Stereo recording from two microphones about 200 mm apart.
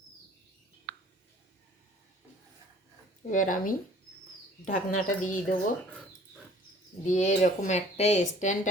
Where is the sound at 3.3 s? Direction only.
40° left (ahead or behind).